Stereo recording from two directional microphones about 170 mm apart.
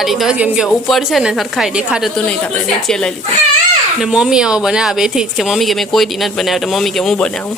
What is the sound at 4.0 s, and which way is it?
A woman's voice, 5° right (ahead or behind).